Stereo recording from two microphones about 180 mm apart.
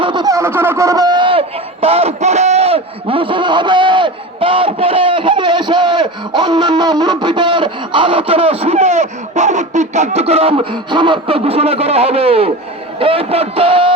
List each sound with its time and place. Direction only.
0.0 s speech: 25° right (ahead or behind)